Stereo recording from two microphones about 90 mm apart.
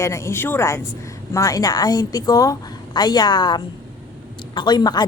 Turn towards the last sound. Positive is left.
turn(degrees=50)  # may be behind; listen again after turning